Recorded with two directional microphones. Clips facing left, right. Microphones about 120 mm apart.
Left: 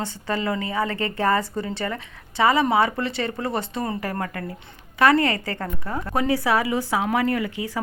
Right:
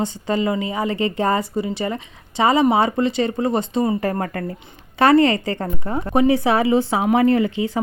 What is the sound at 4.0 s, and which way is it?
Speech, 35° right (ahead or behind).